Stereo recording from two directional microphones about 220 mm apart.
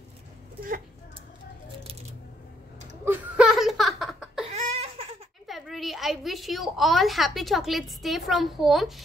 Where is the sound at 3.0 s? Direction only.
5° right (ahead or behind).